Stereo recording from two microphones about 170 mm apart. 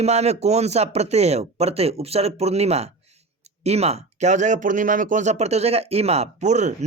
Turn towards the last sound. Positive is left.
turn(degrees=-45)  # may be behind; listen again after turning